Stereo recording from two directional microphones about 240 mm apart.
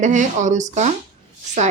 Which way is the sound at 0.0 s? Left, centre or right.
Right.